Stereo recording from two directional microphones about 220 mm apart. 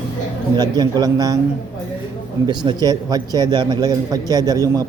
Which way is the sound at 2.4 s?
20° right (ahead or behind).